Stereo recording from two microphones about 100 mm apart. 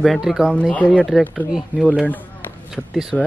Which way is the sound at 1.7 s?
20° right (ahead or behind).